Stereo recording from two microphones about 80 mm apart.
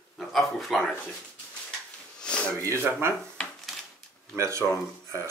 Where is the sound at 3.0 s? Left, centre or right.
Right.